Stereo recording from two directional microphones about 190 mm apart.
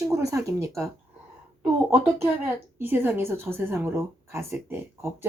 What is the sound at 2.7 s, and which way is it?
A woman's voice, 10° right (ahead or behind).